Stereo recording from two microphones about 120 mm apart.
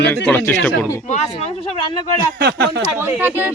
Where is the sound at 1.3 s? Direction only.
50° left (ahead or behind).